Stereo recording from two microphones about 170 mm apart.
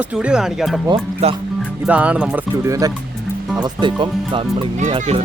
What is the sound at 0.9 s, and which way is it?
Speech, 35° right (ahead or behind).